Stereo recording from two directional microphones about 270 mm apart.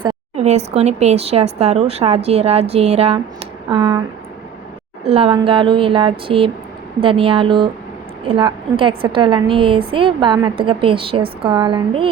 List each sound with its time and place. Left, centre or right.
0.0 s speech: right
5.0 s speech: right